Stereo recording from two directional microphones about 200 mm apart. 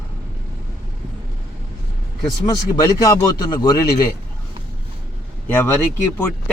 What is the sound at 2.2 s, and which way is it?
A man's voice, 20° left (ahead or behind).